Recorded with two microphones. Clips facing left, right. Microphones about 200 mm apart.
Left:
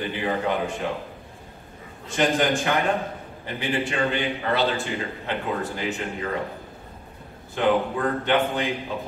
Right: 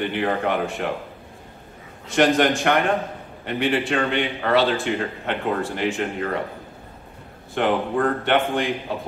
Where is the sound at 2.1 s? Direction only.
75° right (ahead or behind).